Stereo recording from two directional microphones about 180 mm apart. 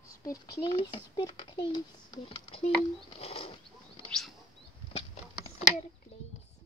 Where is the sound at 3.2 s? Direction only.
35° left (ahead or behind).